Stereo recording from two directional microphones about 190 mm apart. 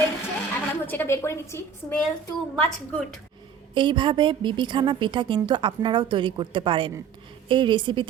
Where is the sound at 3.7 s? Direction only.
25° right (ahead or behind).